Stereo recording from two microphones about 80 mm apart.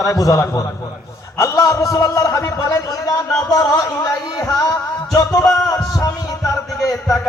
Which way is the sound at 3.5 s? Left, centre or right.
Left.